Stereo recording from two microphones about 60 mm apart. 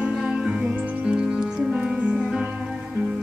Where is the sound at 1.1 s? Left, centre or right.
Centre.